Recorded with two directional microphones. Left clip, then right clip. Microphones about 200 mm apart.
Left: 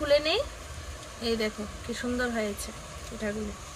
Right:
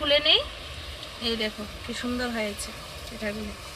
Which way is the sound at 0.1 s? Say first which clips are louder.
Right 4 dB; 25° left (ahead or behind).